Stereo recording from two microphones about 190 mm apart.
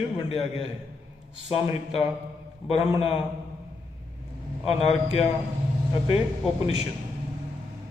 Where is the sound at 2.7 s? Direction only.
30° left (ahead or behind).